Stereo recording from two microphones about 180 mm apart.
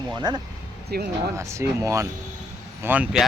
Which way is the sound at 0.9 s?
60° right (ahead or behind).